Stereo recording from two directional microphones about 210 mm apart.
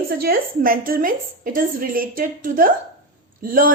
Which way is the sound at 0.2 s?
45° right (ahead or behind).